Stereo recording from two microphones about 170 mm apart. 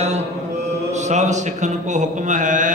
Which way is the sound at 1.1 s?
45° right (ahead or behind).